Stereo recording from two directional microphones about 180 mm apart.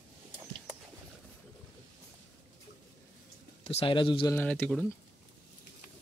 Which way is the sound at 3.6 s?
30° left (ahead or behind).